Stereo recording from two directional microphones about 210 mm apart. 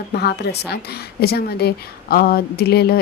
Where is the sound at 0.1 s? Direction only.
50° left (ahead or behind).